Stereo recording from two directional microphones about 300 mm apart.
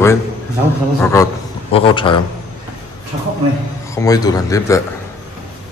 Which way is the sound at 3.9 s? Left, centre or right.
Centre.